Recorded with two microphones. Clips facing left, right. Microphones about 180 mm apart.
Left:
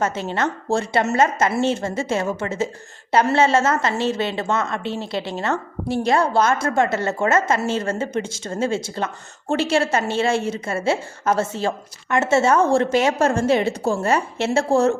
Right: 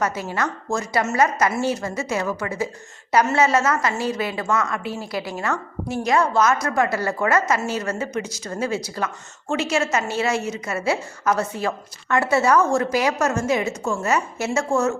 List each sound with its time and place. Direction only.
0.0 s a woman's voice: 25° left (ahead or behind)